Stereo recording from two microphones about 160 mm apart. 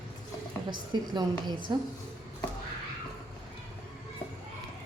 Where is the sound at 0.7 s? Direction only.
30° right (ahead or behind).